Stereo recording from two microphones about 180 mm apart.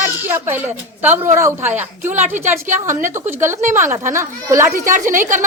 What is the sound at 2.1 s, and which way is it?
Speech, 40° right (ahead or behind).